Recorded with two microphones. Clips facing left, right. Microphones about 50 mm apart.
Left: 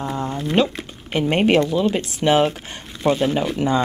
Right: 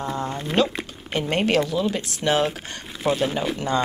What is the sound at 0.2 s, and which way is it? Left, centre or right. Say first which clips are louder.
Speech: left 3 dB; centre.